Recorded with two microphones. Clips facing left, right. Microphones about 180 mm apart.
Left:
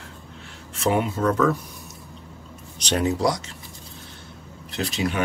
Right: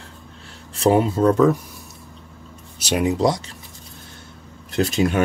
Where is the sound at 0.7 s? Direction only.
30° right (ahead or behind).